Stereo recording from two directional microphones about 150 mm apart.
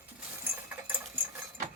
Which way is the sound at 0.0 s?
10° right (ahead or behind).